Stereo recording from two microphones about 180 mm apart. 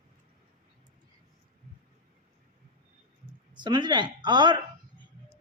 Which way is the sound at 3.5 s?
25° right (ahead or behind).